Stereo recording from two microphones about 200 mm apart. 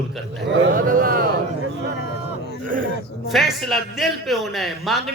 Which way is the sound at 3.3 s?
Centre (ahead or behind).